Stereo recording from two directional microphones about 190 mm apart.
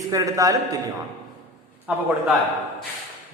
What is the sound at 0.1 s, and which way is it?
Speech, 20° right (ahead or behind).